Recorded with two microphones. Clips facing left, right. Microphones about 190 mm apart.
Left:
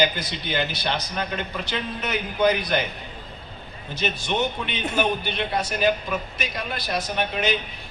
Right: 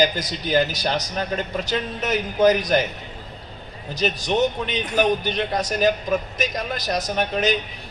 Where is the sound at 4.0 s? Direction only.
40° right (ahead or behind).